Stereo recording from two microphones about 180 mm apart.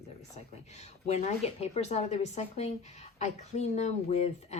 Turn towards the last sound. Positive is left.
turn(degrees=40)  # may be behind; listen again after turning